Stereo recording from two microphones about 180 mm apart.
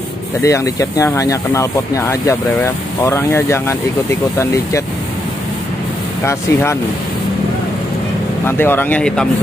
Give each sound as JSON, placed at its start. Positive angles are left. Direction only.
{"t": 0.4, "sound": "speech", "side_deg": 20}
{"t": 6.2, "sound": "speech", "side_deg": 15}
{"t": 8.5, "sound": "speech", "side_deg": 10}